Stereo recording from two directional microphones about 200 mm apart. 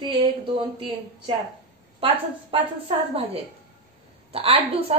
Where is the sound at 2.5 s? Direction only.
25° right (ahead or behind).